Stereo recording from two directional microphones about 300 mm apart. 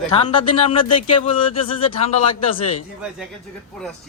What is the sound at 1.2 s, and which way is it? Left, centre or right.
Speech, centre.